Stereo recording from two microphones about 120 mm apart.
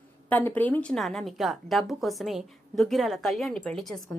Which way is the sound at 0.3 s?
15° left (ahead or behind).